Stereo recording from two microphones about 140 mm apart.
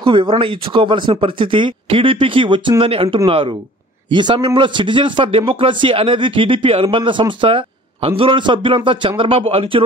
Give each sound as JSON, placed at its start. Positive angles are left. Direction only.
{"t": 0.0, "sound": "speech", "side_deg": -35}